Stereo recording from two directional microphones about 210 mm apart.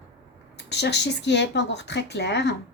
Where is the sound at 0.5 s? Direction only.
55° left (ahead or behind).